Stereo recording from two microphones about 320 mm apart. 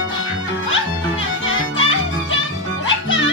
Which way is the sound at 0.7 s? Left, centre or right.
Left.